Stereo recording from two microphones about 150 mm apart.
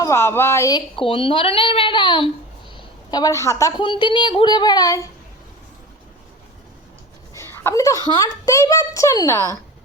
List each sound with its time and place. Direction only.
0.0 s a woman's voice: 20° left (ahead or behind)
0.9 s a woman's voice: 35° left (ahead or behind)
7.3 s a child's voice: 15° left (ahead or behind)